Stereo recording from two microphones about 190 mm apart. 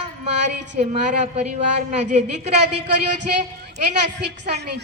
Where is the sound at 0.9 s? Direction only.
35° right (ahead or behind).